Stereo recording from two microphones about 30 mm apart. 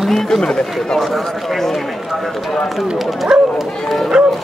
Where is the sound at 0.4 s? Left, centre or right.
Left.